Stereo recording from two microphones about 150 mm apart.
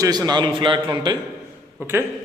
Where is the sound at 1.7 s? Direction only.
15° right (ahead or behind).